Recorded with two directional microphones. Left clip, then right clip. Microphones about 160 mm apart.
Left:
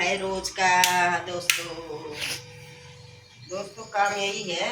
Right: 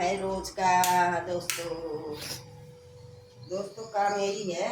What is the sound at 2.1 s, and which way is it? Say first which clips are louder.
Music: left 7 dB; centre (ahead or behind).